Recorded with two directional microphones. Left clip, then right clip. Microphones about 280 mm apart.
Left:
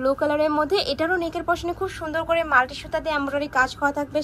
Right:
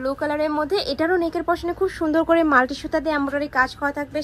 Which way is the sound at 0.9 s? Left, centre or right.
Centre.